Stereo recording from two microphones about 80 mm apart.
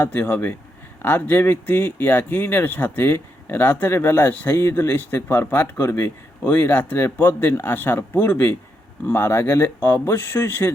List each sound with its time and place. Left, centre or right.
0.0 s speech: left